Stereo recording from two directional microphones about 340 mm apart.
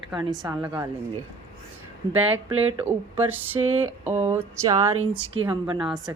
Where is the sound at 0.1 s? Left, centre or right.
Centre.